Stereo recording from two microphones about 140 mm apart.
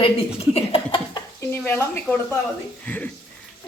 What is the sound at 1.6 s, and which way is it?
Speech, 15° left (ahead or behind).